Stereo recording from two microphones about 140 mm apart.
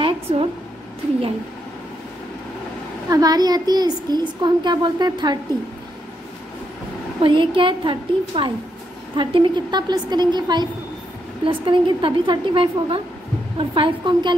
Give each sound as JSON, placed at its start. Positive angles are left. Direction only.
{"t": 0.0, "sound": "a sound", "side_deg": -40}
{"t": 3.1, "sound": "a child's voice", "side_deg": -25}
{"t": 7.2, "sound": "a woman's voice", "side_deg": -40}